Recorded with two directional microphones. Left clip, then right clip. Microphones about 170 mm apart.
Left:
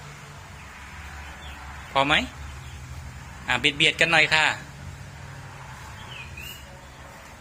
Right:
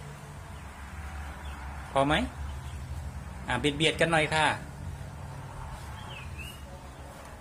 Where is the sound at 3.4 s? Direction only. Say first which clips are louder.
Left 6 dB; 15° right (ahead or behind).